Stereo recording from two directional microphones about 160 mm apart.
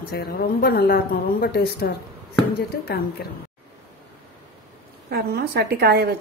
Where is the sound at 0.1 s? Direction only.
70° left (ahead or behind).